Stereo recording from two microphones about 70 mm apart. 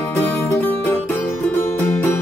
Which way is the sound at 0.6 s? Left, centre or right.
Left.